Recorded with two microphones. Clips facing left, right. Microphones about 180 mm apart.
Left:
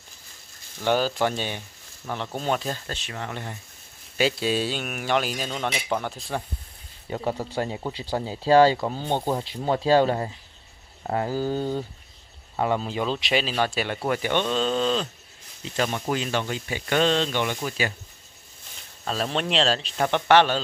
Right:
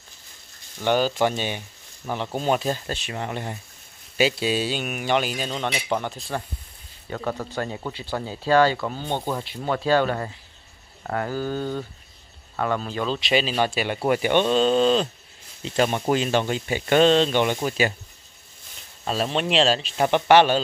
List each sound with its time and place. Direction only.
0.7 s speech: centre (ahead or behind)
2.6 s speech: 20° right (ahead or behind)
4.2 s speech: 5° right (ahead or behind)
7.1 s speech: 20° left (ahead or behind)
7.3 s speech: 30° left (ahead or behind)
9.0 s speech: 5° left (ahead or behind)
9.3 s speech: 25° left (ahead or behind)
13.3 s speech: centre (ahead or behind); by 17.9 s 25° right (ahead or behind)
19.0 s speech: 5° right (ahead or behind)